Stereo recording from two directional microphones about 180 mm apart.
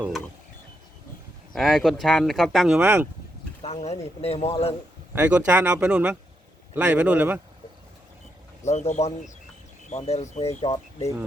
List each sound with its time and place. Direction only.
1.5 s speech: centre (ahead or behind)
3.6 s speech: 35° left (ahead or behind)
5.1 s speech: 10° right (ahead or behind)
8.6 s speech: 40° left (ahead or behind)